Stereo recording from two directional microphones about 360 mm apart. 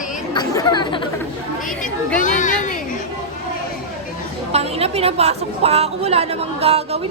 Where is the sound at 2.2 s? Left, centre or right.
Left.